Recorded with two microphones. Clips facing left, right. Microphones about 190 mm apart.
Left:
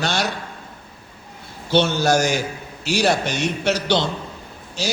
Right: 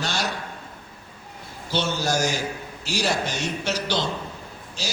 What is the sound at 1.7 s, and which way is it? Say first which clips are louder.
A man's voice: left 7 dB; 65° left (ahead or behind).